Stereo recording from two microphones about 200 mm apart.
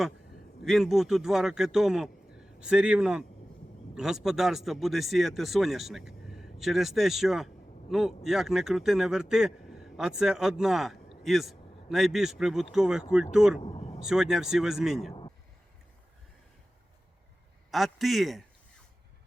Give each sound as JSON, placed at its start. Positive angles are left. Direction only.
{"t": 0.6, "sound": "speech", "side_deg": 0}
{"t": 13.6, "sound": "vehicle", "side_deg": 30}
{"t": 14.0, "sound": "speech", "side_deg": -5}
{"t": 17.7, "sound": "speech", "side_deg": 0}